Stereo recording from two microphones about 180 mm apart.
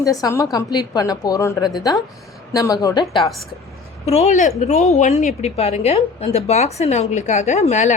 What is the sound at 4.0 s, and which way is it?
A woman's voice, 35° left (ahead or behind).